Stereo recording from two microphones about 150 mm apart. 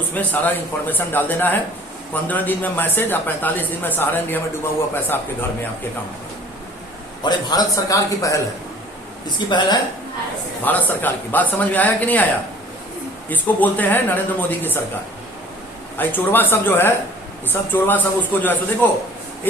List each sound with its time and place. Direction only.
0.1 s speech: 10° left (ahead or behind)
7.2 s a man's voice: 25° left (ahead or behind)
9.5 s speech: 30° left (ahead or behind)
10.6 s speech: 10° left (ahead or behind)
13.3 s speech: 10° left (ahead or behind)
16.0 s speech: 15° left (ahead or behind)